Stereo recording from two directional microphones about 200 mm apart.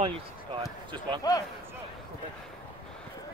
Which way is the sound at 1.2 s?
15° left (ahead or behind).